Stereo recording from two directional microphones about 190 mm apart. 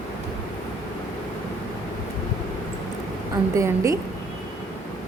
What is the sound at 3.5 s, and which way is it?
Speech, 15° right (ahead or behind).